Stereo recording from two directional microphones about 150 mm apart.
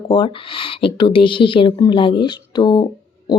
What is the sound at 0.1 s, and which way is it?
Speech, 35° left (ahead or behind).